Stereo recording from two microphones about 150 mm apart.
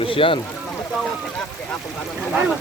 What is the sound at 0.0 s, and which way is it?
Speech, 35° left (ahead or behind).